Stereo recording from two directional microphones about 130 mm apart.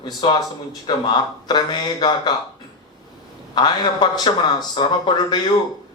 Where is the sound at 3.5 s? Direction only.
35° left (ahead or behind).